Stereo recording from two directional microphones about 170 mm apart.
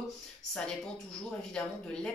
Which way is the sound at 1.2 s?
5° left (ahead or behind).